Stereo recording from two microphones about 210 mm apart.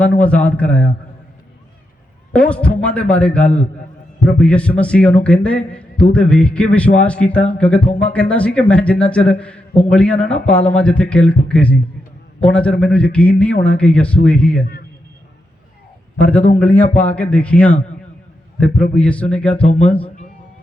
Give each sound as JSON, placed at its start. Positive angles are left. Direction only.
{"t": 0.0, "sound": "a man's voice", "side_deg": 5}
{"t": 2.3, "sound": "a man's voice", "side_deg": 5}
{"t": 16.1, "sound": "a man's voice", "side_deg": 5}
{"t": 18.9, "sound": "a man's voice", "side_deg": 5}